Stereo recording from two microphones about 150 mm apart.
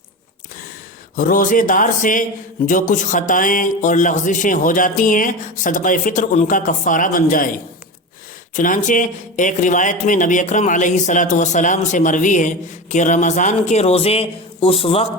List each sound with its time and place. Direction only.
1.1 s a man's voice: 65° left (ahead or behind)
8.5 s a man's voice: 60° left (ahead or behind); by 15.0 s 40° left (ahead or behind)